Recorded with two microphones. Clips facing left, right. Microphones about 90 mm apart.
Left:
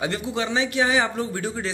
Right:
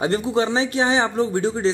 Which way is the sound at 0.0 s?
35° right (ahead or behind).